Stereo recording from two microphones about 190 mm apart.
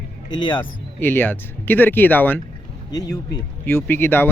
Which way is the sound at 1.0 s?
10° left (ahead or behind).